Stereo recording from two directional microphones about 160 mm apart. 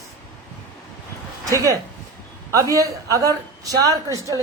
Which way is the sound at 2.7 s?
20° right (ahead or behind).